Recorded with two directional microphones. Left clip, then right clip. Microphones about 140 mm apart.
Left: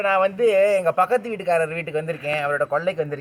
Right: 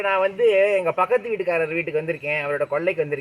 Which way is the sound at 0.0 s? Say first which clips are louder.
Left 1 dB; 15° right (ahead or behind).